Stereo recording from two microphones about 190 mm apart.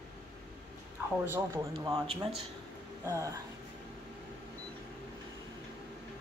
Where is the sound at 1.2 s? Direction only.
15° right (ahead or behind).